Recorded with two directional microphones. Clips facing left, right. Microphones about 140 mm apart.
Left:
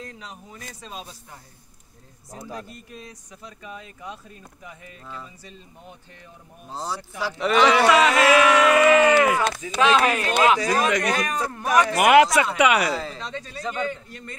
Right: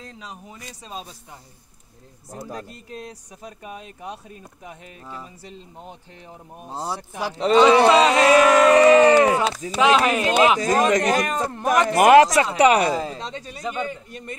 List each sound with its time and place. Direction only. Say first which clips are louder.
0.0 s speech: even; 20° right (ahead or behind)
3.4 s speech: right 3 dB; 55° right (ahead or behind)
5.0 s speech: right 2 dB; 20° right (ahead or behind)
7.3 s a sound: right 4 dB; 30° right (ahead or behind)
9.7 s speech: right 2 dB; 15° right (ahead or behind)
10.6 s a man's voice: right 3 dB; 45° right (ahead or behind)
13.2 s speech: right 1 dB; 20° right (ahead or behind)